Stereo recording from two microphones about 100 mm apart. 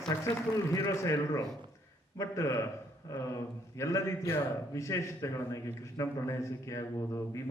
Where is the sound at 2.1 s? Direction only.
30° left (ahead or behind).